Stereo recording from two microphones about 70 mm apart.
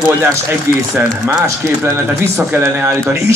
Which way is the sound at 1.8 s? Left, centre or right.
Right.